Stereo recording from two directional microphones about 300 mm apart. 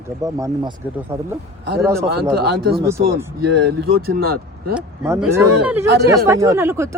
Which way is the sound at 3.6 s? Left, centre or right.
Right.